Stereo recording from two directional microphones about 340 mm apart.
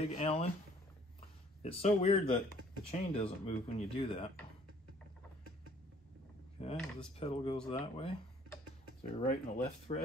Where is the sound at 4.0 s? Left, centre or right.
Centre.